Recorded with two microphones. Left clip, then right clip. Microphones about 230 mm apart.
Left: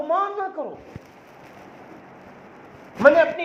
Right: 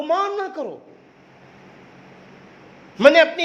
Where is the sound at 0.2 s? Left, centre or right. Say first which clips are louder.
Right 1 dB; right.